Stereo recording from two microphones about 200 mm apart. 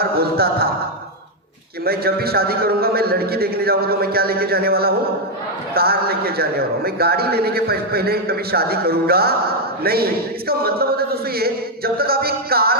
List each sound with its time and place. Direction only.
0.0 s a man's voice: 50° right (ahead or behind)
1.8 s a man's voice: 50° right (ahead or behind)